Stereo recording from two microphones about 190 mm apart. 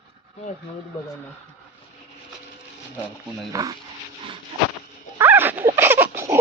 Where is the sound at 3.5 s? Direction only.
15° right (ahead or behind).